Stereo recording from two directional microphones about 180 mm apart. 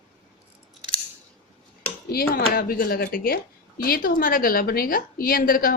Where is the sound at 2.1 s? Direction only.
55° left (ahead or behind).